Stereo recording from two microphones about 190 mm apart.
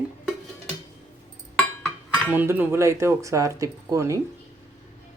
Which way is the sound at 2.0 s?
10° right (ahead or behind).